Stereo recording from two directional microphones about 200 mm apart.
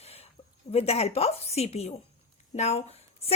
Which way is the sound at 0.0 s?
30° left (ahead or behind).